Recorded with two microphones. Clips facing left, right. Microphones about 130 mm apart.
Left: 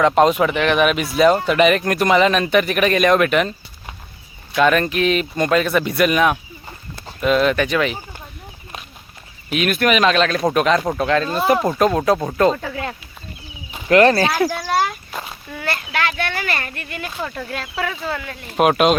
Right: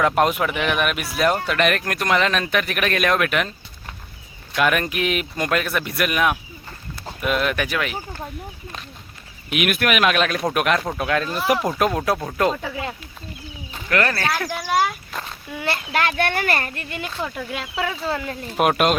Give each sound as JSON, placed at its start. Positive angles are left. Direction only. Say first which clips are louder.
{"t": 0.2, "sound": "speech", "louder": "left 5 dB", "side_deg": -5}
{"t": 4.5, "sound": "speech", "louder": "left 5 dB", "side_deg": -10}
{"t": 9.5, "sound": "speech", "louder": "left 3 dB", "side_deg": -10}
{"t": 12.7, "sound": "speech", "louder": "left 2 dB", "side_deg": -15}
{"t": 13.8, "sound": "speech", "louder": "left 9 dB", "side_deg": 25}
{"t": 14.7, "sound": "speech", "louder": "left 1 dB", "side_deg": 0}
{"t": 15.6, "sound": "speech", "louder": "even", "side_deg": -25}
{"t": 16.0, "sound": "speech", "louder": "right 2 dB", "side_deg": -50}
{"t": 16.7, "sound": "speech", "louder": "even", "side_deg": -25}
{"t": 17.2, "sound": "speech", "louder": "left 1 dB", "side_deg": -5}
{"t": 18.1, "sound": "speech", "louder": "right 2 dB", "side_deg": -30}
{"t": 18.5, "sound": "speech", "louder": "left 4 dB", "side_deg": 0}